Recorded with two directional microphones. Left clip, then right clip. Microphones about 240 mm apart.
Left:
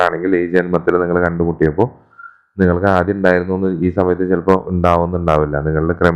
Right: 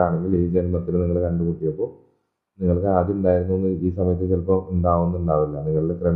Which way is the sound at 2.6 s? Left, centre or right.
Left.